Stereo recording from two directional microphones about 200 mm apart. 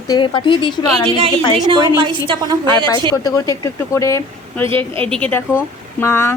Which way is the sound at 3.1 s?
15° left (ahead or behind).